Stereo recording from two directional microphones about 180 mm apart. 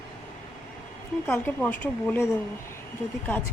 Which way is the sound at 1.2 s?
10° left (ahead or behind).